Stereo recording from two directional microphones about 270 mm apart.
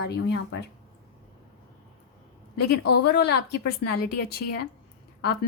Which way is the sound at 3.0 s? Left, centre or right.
Left.